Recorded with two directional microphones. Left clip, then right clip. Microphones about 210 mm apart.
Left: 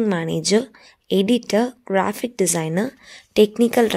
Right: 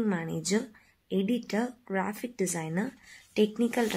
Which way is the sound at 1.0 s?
45° left (ahead or behind).